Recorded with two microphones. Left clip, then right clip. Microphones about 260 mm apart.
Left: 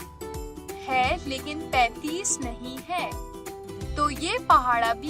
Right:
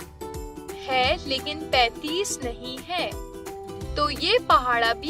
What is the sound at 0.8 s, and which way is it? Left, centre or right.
Speech, centre.